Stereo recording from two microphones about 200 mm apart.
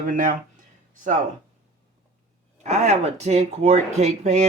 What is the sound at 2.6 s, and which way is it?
Speech, 35° right (ahead or behind).